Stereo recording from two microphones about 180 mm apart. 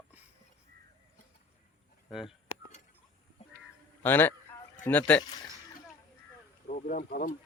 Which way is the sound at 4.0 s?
10° left (ahead or behind).